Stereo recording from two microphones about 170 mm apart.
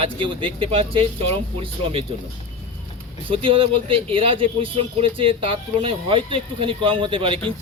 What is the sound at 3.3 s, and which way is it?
A man's voice, 30° right (ahead or behind).